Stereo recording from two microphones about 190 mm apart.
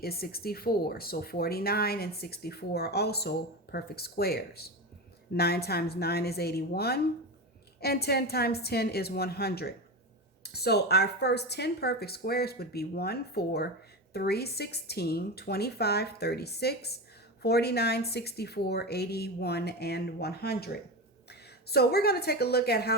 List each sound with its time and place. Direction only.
0.0 s a woman's voice: 55° left (ahead or behind)